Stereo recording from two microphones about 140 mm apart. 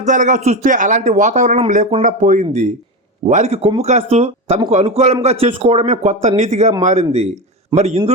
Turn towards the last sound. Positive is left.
turn(degrees=-50)  # may be behind; listen again after turning